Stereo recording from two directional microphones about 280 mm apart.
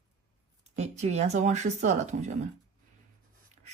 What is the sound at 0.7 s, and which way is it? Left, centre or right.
A woman's voice, right.